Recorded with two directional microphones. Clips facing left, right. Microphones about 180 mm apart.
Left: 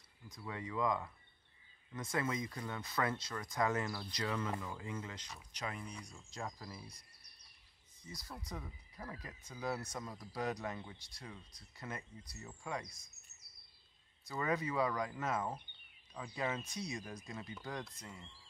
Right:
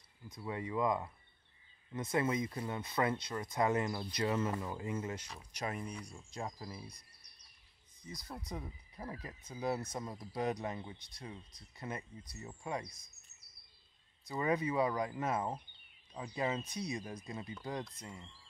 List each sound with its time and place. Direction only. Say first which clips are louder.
0.3 s speech: right 4 dB; 25° right (ahead or behind)
5.9 s speech: right 4 dB; 5° right (ahead or behind)
6.3 s speech: right 2 dB; 20° right (ahead or behind)
8.2 s speech: right 4 dB; centre (ahead or behind)
8.5 s speech: right 3 dB; 25° right (ahead or behind)
14.2 s speech: right 3 dB; 20° right (ahead or behind)
16.6 s speech: right 3 dB; centre (ahead or behind)
16.9 s speech: right 3 dB; 20° right (ahead or behind)